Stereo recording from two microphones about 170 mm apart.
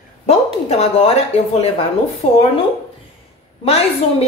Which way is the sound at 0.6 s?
35° left (ahead or behind).